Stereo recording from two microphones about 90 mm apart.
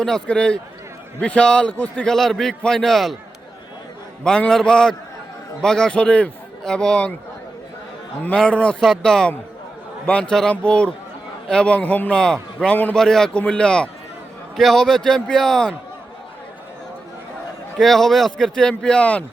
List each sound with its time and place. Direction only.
0.0 s a man's voice: 10° left (ahead or behind)
2.0 s a man's voice: 5° left (ahead or behind)
4.2 s a man's voice: 10° left (ahead or behind)
8.4 s a man's voice: 10° left (ahead or behind)
17.7 s a man's voice: 5° left (ahead or behind)